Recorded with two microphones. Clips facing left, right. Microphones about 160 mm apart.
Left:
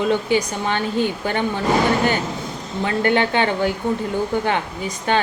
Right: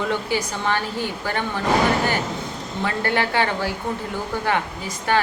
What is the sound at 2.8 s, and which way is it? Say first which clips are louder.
Speech: left 5 dB; 20° left (ahead or behind).